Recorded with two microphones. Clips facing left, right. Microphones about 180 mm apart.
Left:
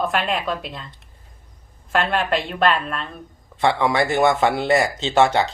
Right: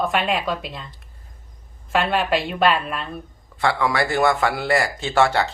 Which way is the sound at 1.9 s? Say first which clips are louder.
Right 1 dB; centre (ahead or behind).